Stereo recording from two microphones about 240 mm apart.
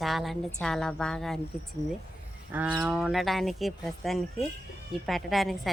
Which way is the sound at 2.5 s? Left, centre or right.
Centre.